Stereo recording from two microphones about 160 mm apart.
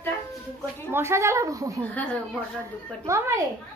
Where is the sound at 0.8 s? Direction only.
15° right (ahead or behind).